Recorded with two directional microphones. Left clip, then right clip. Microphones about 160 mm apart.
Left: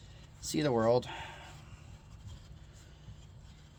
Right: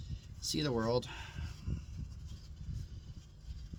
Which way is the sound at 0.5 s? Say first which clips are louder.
Left 6 dB; 30° right (ahead or behind).